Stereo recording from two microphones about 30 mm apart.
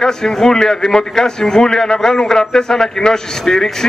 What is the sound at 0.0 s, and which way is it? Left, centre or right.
A man's voice, centre.